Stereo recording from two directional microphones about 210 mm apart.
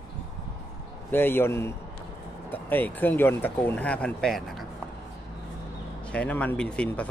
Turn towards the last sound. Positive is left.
turn(degrees=5)  # may be behind; listen again after turning